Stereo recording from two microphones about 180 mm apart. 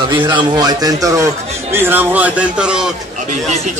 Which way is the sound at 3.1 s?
40° right (ahead or behind).